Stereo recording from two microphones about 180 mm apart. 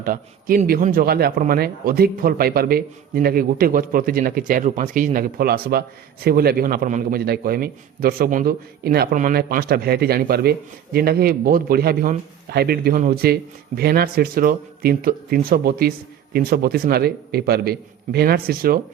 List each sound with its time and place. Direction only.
0.0 s a man's voice: 50° right (ahead or behind)